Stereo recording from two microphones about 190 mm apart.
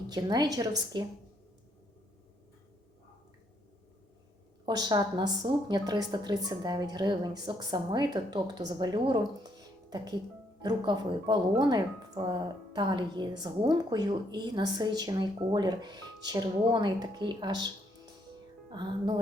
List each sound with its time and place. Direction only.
0.1 s speech: 20° right (ahead or behind)
4.6 s speech: 20° right (ahead or behind)
18.7 s speech: 25° right (ahead or behind)